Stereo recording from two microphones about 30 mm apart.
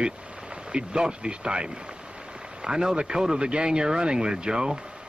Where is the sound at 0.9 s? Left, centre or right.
Right.